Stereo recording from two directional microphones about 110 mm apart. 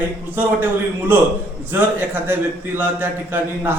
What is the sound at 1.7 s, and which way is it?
A man's voice, 20° right (ahead or behind).